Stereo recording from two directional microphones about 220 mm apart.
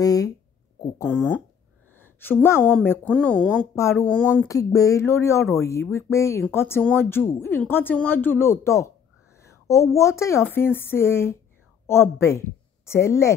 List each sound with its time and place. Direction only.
0.0 s a woman's voice: 15° left (ahead or behind)
9.4 s a sound: 15° left (ahead or behind)
9.9 s a woman's voice: 15° left (ahead or behind)